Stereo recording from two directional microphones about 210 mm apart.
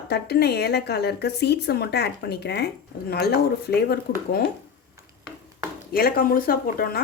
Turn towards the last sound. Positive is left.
turn(degrees=45)  # may be behind; listen again after turning